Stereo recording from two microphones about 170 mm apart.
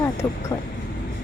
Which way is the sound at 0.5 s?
20° left (ahead or behind).